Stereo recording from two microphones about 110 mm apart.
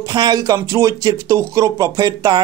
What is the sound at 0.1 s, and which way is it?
Speech, 35° right (ahead or behind).